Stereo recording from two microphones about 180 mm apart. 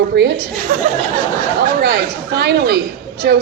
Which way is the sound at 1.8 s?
65° right (ahead or behind).